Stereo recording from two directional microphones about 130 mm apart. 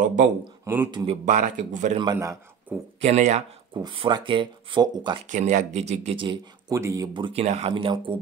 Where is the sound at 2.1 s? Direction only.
20° right (ahead or behind).